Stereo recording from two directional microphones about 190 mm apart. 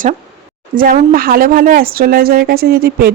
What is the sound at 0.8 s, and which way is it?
Speech, 50° right (ahead or behind).